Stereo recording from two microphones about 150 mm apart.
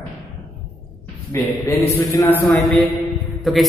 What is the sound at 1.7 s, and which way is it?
Speech, 20° left (ahead or behind).